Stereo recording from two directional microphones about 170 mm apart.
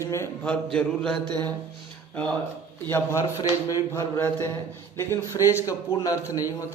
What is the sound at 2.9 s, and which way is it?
Speech, 15° left (ahead or behind).